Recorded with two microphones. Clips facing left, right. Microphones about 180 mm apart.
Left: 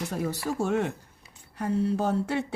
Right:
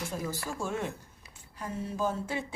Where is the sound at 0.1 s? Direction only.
65° left (ahead or behind).